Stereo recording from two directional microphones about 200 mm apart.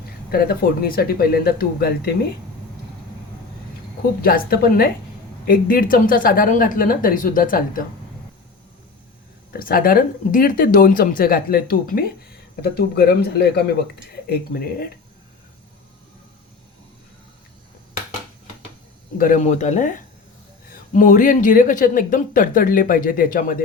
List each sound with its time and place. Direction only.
0.3 s speech: 50° left (ahead or behind)
4.2 s speech: 45° left (ahead or behind)
9.5 s speech: 45° left (ahead or behind)
19.1 s speech: 45° left (ahead or behind)